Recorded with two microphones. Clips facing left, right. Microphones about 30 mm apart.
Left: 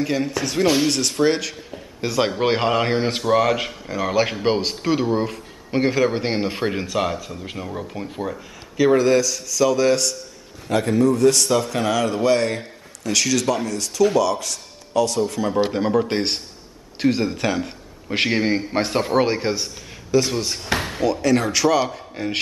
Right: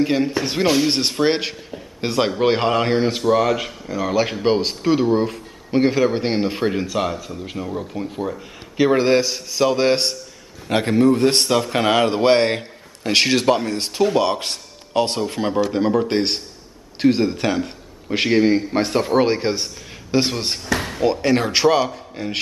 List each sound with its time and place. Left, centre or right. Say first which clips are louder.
0.3 s a man's voice: right 1 dB; right
2.1 s a man's voice: right 2 dB; centre
3.1 s a man's voice: right 1 dB; centre
8.9 s a man's voice: even; right
15.7 s a man's voice: right 2 dB; centre
19.2 s a man's voice: right 2 dB; centre
20.1 s a man's voice: even; right
21.8 s a man's voice: even; centre